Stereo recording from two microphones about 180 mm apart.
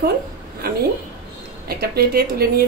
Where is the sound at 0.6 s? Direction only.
55° right (ahead or behind).